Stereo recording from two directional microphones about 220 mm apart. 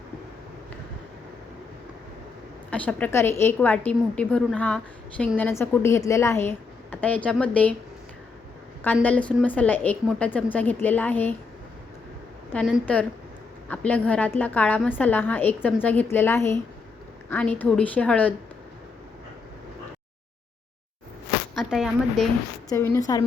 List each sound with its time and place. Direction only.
2.6 s a woman's voice: 5° left (ahead or behind)
9.0 s a woman's voice: 5° left (ahead or behind)
12.5 s a woman's voice: centre (ahead or behind)
21.5 s a woman's voice: centre (ahead or behind)
22.7 s a woman's voice: 10° left (ahead or behind)